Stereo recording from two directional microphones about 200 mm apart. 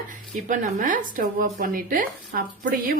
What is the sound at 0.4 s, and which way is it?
Speech, 40° right (ahead or behind).